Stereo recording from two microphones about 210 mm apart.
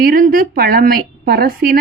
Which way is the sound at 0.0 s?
40° right (ahead or behind).